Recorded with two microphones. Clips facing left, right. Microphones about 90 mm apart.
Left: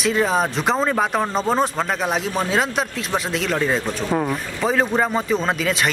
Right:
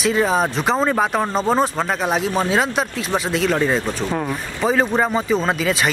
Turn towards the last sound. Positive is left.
turn(degrees=0)  # may be behind; listen again after turning